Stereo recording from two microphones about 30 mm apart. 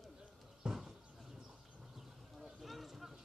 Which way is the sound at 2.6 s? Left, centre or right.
Centre.